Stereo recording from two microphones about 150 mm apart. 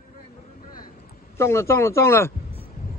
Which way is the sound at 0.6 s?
70° left (ahead or behind).